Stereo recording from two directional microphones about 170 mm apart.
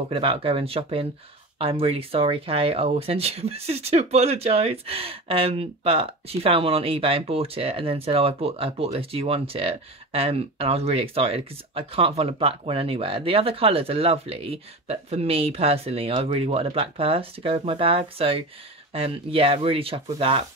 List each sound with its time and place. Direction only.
0.1 s speech: 35° right (ahead or behind)